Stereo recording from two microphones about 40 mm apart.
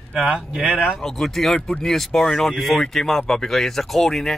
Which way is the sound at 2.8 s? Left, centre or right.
Centre.